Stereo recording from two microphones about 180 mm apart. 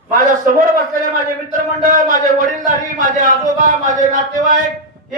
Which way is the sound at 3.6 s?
45° right (ahead or behind).